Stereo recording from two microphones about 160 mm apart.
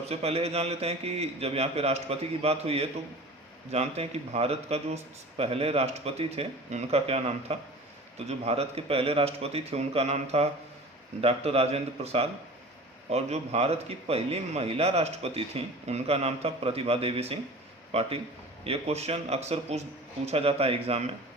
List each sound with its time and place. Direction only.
0.1 s a man's voice: 40° right (ahead or behind)